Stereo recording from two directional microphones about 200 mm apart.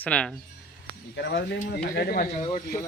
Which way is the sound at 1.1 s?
60° left (ahead or behind).